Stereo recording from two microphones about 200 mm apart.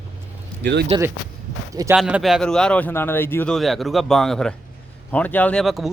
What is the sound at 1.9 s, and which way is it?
Speech, 5° right (ahead or behind).